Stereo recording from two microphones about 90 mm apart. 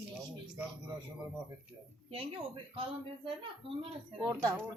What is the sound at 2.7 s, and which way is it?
Speech, 90° right.